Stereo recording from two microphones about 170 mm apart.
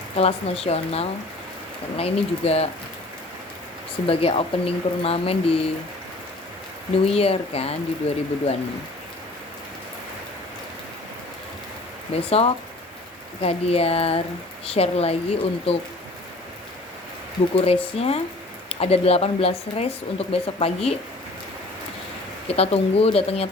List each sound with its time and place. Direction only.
0.2 s speech: 35° left (ahead or behind)
4.0 s speech: 35° left (ahead or behind)
7.0 s speech: 35° left (ahead or behind)
12.1 s speech: 35° left (ahead or behind)
17.5 s speech: 35° left (ahead or behind)
22.4 s speech: 35° left (ahead or behind)